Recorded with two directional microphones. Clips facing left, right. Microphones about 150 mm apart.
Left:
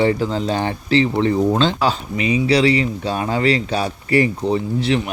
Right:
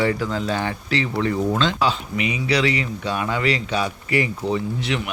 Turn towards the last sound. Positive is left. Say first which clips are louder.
# left 5 dB
turn(degrees=35)  # may be behind; listen again after turning